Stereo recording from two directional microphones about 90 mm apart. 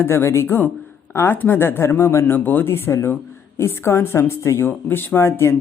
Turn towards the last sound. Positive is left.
turn(degrees=30)  # may be behind; listen again after turning